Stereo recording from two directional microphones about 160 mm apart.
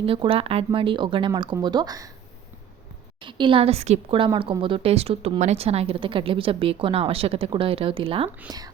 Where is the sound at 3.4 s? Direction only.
35° right (ahead or behind).